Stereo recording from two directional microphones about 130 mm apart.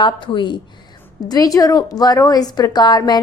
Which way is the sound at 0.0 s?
40° left (ahead or behind).